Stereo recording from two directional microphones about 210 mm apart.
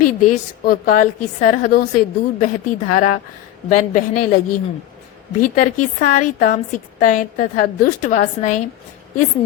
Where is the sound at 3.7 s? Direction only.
40° left (ahead or behind).